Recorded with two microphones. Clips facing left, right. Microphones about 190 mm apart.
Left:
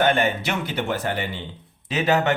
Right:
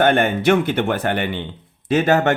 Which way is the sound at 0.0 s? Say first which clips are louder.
Right 5 dB; 55° right (ahead or behind).